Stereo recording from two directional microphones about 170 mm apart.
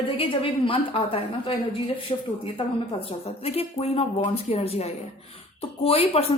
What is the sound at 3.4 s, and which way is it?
Speech, 35° left (ahead or behind).